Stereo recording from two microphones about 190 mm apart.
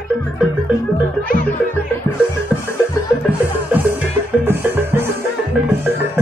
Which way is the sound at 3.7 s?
10° right (ahead or behind).